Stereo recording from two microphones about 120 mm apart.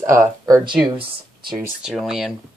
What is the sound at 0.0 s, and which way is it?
Speech, 25° right (ahead or behind).